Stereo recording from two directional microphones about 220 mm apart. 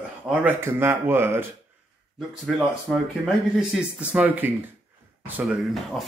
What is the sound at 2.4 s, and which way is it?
Speech, centre (ahead or behind).